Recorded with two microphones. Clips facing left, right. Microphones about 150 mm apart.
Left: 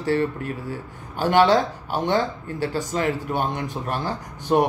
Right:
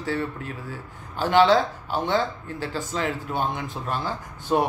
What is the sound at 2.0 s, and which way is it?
A man's voice, 40° left (ahead or behind).